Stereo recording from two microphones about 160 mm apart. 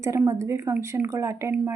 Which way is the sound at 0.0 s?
20° right (ahead or behind).